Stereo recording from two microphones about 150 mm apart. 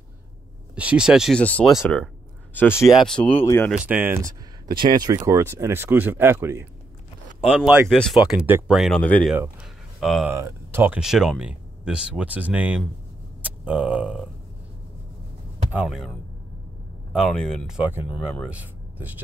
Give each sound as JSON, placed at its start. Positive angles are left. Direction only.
{"t": 0.7, "sound": "speech", "side_deg": -5}
{"t": 2.5, "sound": "speech", "side_deg": 15}
{"t": 2.9, "sound": "speech", "side_deg": 0}
{"t": 3.4, "sound": "speech", "side_deg": 15}
{"t": 3.7, "sound": "speech", "side_deg": -10}
{"t": 4.9, "sound": "speech", "side_deg": -25}
{"t": 7.9, "sound": "speech", "side_deg": 5}
{"t": 8.2, "sound": "speech", "side_deg": -10}
{"t": 9.0, "sound": "speech", "side_deg": 10}
{"t": 9.9, "sound": "speech", "side_deg": 0}
{"t": 10.3, "sound": "speech", "side_deg": -15}
{"t": 11.0, "sound": "speech", "side_deg": -5}
{"t": 15.7, "sound": "speech", "side_deg": -5}
{"t": 17.1, "sound": "speech", "side_deg": 5}